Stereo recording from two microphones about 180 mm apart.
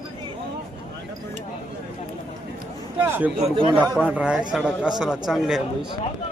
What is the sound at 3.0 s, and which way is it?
Speech, 10° right (ahead or behind).